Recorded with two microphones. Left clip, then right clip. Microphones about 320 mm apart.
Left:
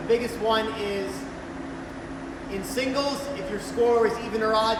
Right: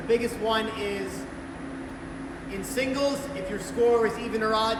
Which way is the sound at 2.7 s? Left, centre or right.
Centre.